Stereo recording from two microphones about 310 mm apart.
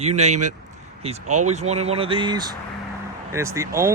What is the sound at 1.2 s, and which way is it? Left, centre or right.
Speech, right.